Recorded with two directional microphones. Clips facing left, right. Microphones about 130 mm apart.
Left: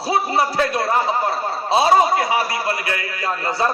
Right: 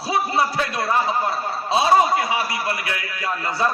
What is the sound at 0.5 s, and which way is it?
A man's voice, 30° left (ahead or behind).